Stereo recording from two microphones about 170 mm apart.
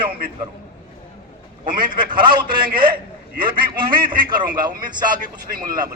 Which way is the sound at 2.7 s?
60° right (ahead or behind).